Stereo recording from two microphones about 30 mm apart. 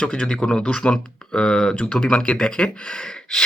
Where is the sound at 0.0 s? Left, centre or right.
Left.